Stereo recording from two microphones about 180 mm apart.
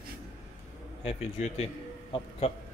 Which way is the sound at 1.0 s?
35° left (ahead or behind).